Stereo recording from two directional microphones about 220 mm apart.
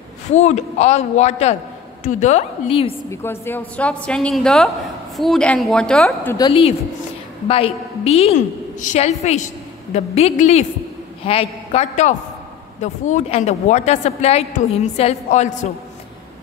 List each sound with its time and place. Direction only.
0.3 s a woman's voice: 30° left (ahead or behind)
3.1 s a woman's voice: 10° left (ahead or behind)
6.3 s a woman's voice: 20° left (ahead or behind)